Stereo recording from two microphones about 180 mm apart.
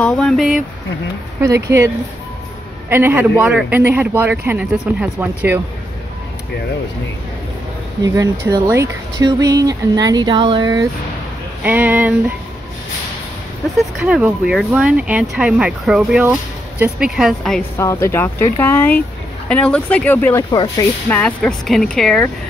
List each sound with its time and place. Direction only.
0.0 s speech: 5° left (ahead or behind)
1.4 s speech: 15° right (ahead or behind)
2.9 s speech: 10° right (ahead or behind)
8.0 s speech: 20° right (ahead or behind)
11.6 s speech: 10° right (ahead or behind)
13.9 s speech: 5° right (ahead or behind)
17.7 s speech: 15° left (ahead or behind)
20.5 s speech: 25° left (ahead or behind)
21.1 s speech: 5° left (ahead or behind)